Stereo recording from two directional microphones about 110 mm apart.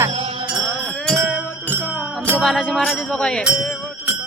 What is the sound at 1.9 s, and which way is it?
Music, 10° right (ahead or behind).